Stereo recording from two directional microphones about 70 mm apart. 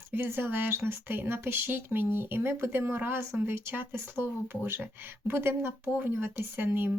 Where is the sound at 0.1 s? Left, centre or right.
Right.